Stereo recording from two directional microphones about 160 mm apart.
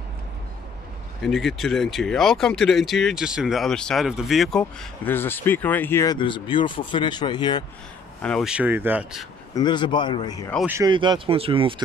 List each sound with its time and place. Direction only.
1.2 s speech: centre (ahead or behind)
6.1 s speech: 30° left (ahead or behind)
8.2 s speech: 5° left (ahead or behind)
8.5 s speech: 10° right (ahead or behind)
9.5 s speech: 25° left (ahead or behind)
10.9 s speech: 30° right (ahead or behind)